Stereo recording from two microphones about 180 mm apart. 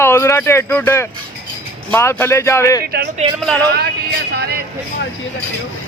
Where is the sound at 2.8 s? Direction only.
60° right (ahead or behind).